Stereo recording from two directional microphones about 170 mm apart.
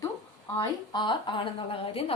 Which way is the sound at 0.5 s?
25° left (ahead or behind).